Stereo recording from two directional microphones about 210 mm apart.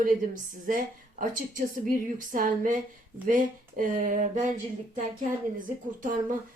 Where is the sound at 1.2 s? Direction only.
40° right (ahead or behind).